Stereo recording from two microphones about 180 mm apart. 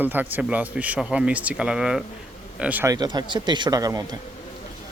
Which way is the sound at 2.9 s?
25° right (ahead or behind).